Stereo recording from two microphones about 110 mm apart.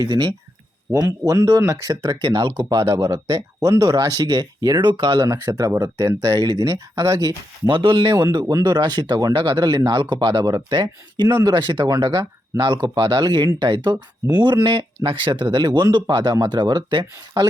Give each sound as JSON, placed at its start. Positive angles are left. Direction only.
{"t": 0.0, "sound": "speech", "side_deg": -40}
{"t": 2.2, "sound": "speech", "side_deg": -45}
{"t": 2.6, "sound": "speech", "side_deg": -30}
{"t": 5.3, "sound": "speech", "side_deg": -30}
{"t": 7.7, "sound": "speech", "side_deg": -50}
{"t": 8.3, "sound": "speech", "side_deg": -35}